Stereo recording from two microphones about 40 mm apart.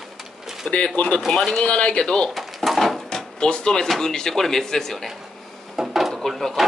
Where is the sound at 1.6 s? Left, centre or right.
Left.